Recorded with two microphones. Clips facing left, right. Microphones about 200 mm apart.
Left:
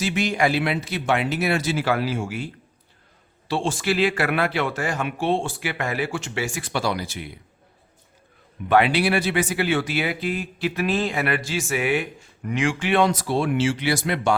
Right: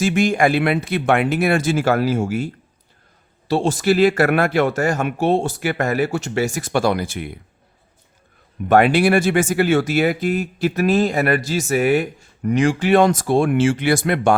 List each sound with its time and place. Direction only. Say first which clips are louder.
0.0 s speech: right 6 dB; 50° right (ahead or behind)
3.5 s speech: right 6 dB; 40° right (ahead or behind)
8.6 s speech: right 5 dB; 45° right (ahead or behind)